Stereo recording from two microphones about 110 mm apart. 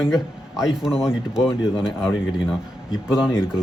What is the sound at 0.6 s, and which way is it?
A man's voice, 5° right (ahead or behind).